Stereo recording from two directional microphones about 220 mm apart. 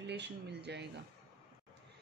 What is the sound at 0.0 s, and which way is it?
Speech, 50° right (ahead or behind).